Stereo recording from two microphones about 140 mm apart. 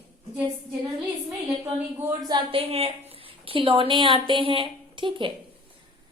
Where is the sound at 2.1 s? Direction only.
30° right (ahead or behind).